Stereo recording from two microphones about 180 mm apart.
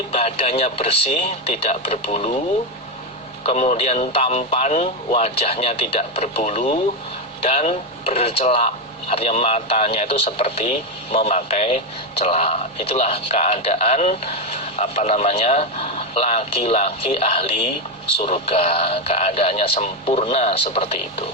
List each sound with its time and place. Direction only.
0.1 s speech: 35° left (ahead or behind)
3.4 s speech: 35° left (ahead or behind)